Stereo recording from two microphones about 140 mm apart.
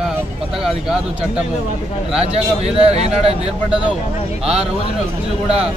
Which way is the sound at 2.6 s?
50° right (ahead or behind).